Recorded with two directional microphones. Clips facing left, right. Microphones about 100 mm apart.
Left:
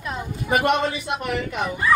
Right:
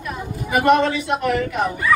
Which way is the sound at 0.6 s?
45° right (ahead or behind).